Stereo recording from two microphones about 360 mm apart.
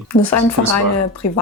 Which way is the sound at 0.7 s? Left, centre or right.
Left.